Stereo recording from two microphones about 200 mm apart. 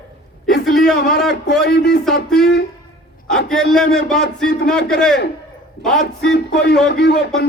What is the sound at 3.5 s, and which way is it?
Music, 5° left (ahead or behind).